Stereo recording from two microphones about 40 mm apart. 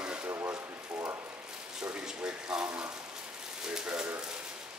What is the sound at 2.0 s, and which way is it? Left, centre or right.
Speech, centre.